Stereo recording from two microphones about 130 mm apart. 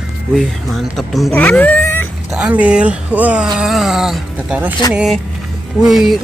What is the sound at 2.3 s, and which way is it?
Speech, 10° right (ahead or behind).